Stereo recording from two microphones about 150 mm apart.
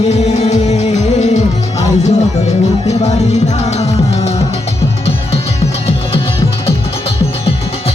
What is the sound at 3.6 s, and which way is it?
Music, 45° left (ahead or behind).